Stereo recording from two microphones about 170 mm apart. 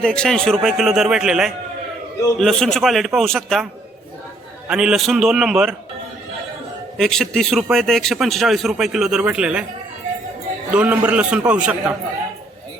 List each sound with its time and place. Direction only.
0.0 s a man's voice: 5° left (ahead or behind)
4.7 s a man's voice: centre (ahead or behind)
6.9 s a man's voice: centre (ahead or behind)
10.7 s a man's voice: 5° right (ahead or behind)